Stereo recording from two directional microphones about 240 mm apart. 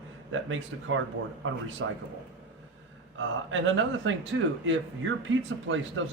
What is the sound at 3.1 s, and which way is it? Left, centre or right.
A man's voice, right.